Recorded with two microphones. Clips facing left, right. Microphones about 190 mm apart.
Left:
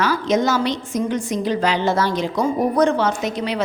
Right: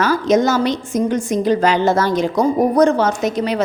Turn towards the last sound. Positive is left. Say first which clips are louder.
# right 4 dB
turn(degrees=-45)  # may be behind; listen again after turning